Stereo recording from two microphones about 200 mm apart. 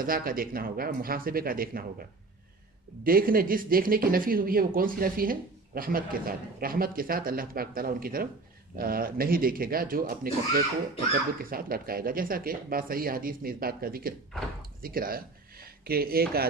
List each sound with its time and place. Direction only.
0.0 s speech: 45° right (ahead or behind)
3.0 s speech: 45° right (ahead or behind)